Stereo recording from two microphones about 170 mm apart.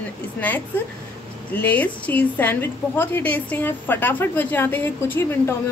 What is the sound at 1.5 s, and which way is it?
A woman's voice, 10° left (ahead or behind).